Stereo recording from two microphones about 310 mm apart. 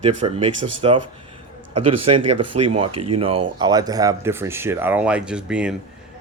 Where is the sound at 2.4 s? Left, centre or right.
Right.